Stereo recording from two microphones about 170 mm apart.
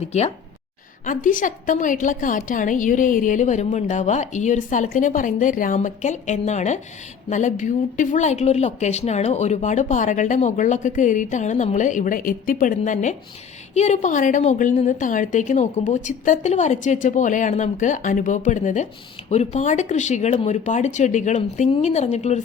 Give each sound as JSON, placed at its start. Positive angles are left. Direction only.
{"t": 1.0, "sound": "a woman's voice", "side_deg": 50}